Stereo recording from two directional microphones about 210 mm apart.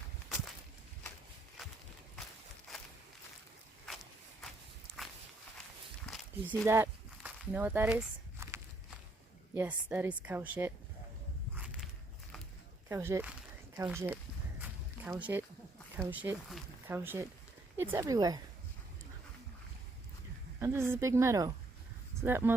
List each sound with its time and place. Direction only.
1.6 s walk: centre (ahead or behind)
6.1 s walk: centre (ahead or behind)
6.7 s walk: 10° right (ahead or behind)
9.6 s a woman's voice: 10° right (ahead or behind)
11.5 s a sound: 5° right (ahead or behind)
12.9 s a woman's voice: 10° right (ahead or behind)
14.6 s a sound: 5° right (ahead or behind)
16.0 s a woman's voice: 10° right (ahead or behind)
20.6 s a woman's voice: 10° right (ahead or behind)